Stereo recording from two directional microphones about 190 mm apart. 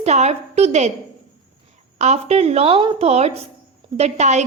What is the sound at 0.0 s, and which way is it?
Speech, 35° right (ahead or behind).